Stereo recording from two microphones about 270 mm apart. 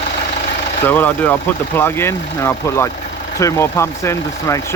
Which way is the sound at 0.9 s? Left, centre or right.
Centre.